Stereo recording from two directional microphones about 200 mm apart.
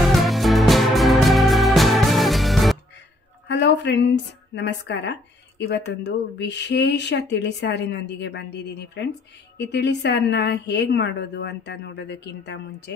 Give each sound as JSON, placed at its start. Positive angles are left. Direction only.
{"t": 0.0, "sound": "music", "side_deg": 0}
{"t": 3.4, "sound": "a woman's voice", "side_deg": 60}